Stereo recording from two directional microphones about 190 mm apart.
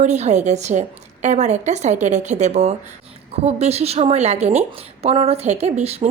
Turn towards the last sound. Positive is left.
turn(degrees=-35)  # may be behind; listen again after turning